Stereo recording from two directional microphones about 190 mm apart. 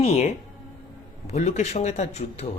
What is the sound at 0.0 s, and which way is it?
Speech, 35° left (ahead or behind).